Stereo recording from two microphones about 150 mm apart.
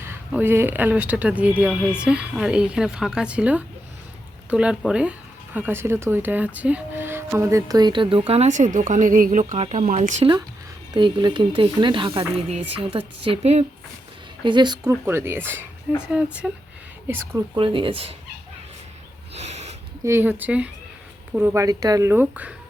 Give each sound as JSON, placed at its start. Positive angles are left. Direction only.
{"t": 0.0, "sound": "speech", "side_deg": -15}
{"t": 10.9, "sound": "speech", "side_deg": -30}
{"t": 14.4, "sound": "speech", "side_deg": -30}
{"t": 14.8, "sound": "speech", "side_deg": -15}
{"t": 17.1, "sound": "speech", "side_deg": -15}
{"t": 17.6, "sound": "speech", "side_deg": -35}
{"t": 19.3, "sound": "a sound", "side_deg": -45}
{"t": 20.1, "sound": "speech", "side_deg": -15}